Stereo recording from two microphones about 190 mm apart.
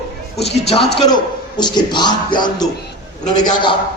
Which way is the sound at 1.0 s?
20° left (ahead or behind).